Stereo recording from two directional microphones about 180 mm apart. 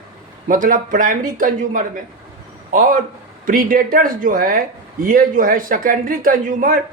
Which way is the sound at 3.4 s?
50° right (ahead or behind).